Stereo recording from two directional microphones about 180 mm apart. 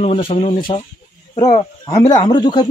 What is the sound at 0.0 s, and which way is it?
Speech, 35° left (ahead or behind).